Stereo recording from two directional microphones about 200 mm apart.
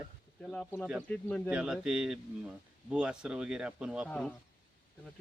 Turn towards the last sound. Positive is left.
turn(degrees=5)  # may be behind; listen again after turning